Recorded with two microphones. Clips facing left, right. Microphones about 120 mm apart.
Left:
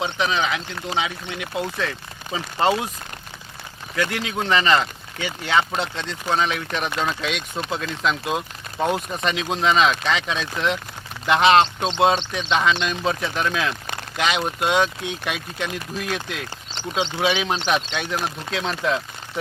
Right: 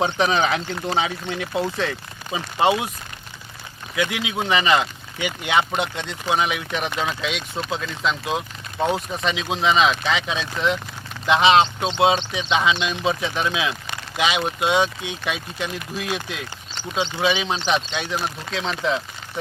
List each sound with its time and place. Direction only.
0.0 s speech: 35° right (ahead or behind)
2.3 s speech: 10° right (ahead or behind)
3.9 s speech: 10° right (ahead or behind)